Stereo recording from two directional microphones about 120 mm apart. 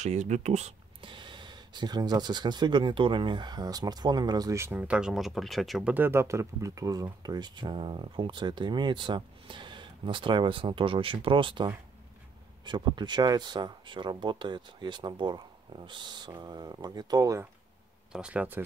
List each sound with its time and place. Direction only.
0.0 s speech: 70° right (ahead or behind)
1.0 s speech: 40° right (ahead or behind); by 4.7 s 25° right (ahead or behind)
4.7 s speech: 10° right (ahead or behind)
5.9 s speech: 20° right (ahead or behind)
18.1 s speech: 10° right (ahead or behind)